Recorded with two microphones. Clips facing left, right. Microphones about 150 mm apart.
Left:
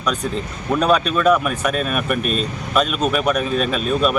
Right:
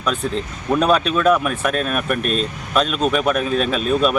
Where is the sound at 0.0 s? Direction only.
5° right (ahead or behind).